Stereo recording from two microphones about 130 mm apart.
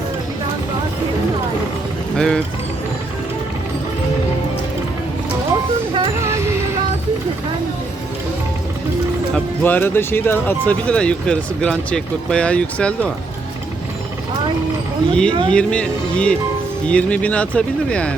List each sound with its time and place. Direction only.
2.1 s speech: 5° left (ahead or behind)
6.1 s a sound: 20° right (ahead or behind)
9.3 s speech: 15° left (ahead or behind)
15.1 s speech: 10° left (ahead or behind)